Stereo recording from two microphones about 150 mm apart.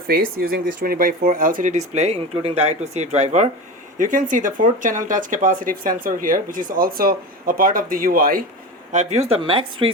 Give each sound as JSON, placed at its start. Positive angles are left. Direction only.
{"t": 0.1, "sound": "speech", "side_deg": -80}
{"t": 3.9, "sound": "speech", "side_deg": -60}
{"t": 8.9, "sound": "speech", "side_deg": -50}